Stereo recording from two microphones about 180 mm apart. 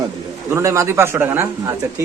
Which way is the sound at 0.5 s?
15° right (ahead or behind).